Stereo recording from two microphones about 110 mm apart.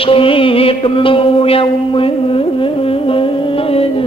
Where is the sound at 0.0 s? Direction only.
55° left (ahead or behind).